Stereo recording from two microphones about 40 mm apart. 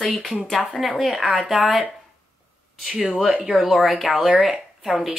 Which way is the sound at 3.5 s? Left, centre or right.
Right.